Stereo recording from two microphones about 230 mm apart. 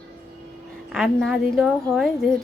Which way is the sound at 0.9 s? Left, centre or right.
Centre.